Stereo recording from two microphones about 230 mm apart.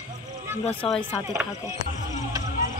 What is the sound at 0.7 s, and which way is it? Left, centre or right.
Speech, centre.